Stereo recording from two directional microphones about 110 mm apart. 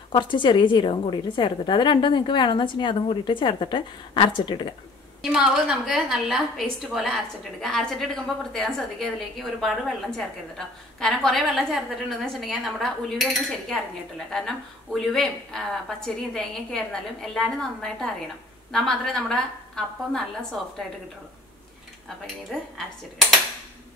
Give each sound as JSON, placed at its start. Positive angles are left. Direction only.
{"t": 0.1, "sound": "a woman's voice", "side_deg": 45}
{"t": 5.2, "sound": "speech", "side_deg": -5}
{"t": 22.5, "sound": "speech", "side_deg": 0}